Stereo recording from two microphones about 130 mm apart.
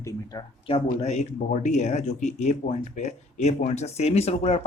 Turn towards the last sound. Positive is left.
turn(degrees=55)  # may be behind; listen again after turning